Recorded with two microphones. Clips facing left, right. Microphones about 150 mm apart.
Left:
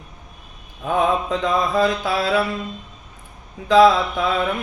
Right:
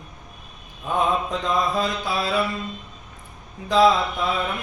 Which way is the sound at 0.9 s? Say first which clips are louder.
Left 3 dB; 80° left.